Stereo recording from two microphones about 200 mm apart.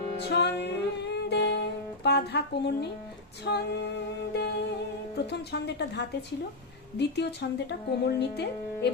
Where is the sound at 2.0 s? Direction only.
55° left (ahead or behind).